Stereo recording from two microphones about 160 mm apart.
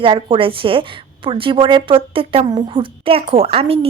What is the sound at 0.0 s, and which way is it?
A woman's voice, 30° right (ahead or behind).